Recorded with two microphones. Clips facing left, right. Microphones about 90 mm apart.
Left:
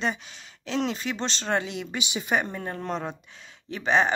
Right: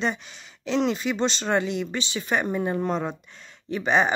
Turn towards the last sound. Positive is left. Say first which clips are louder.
# right 1 dB
turn(degrees=-5)  # may be behind; listen again after turning